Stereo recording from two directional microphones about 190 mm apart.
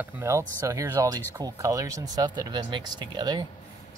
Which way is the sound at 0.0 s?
15° right (ahead or behind).